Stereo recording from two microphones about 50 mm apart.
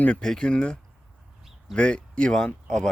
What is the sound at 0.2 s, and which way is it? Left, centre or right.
Speech, centre.